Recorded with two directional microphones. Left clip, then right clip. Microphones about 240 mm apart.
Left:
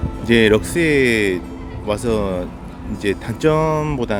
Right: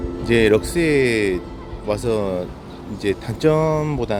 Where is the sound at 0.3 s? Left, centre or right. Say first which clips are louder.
Left 2 dB; centre.